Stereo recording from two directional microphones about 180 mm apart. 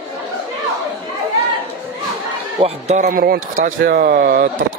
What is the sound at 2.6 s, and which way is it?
Speech, 40° right (ahead or behind).